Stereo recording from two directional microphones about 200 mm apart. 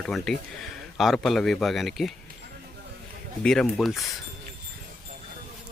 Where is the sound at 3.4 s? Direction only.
Centre (ahead or behind).